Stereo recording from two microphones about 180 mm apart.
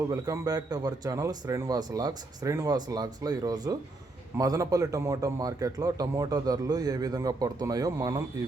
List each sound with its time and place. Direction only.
0.1 s a man's voice: 20° right (ahead or behind)